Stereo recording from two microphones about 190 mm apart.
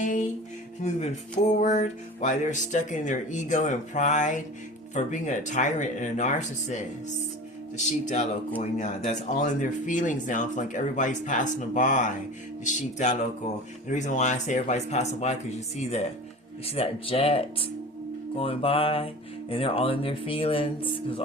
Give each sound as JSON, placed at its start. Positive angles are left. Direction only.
{"t": 0.0, "sound": "music", "side_deg": 40}
{"t": 0.8, "sound": "speech", "side_deg": 35}
{"t": 7.9, "sound": "speech", "side_deg": 35}
{"t": 16.6, "sound": "speech", "side_deg": 30}
{"t": 18.3, "sound": "music", "side_deg": 30}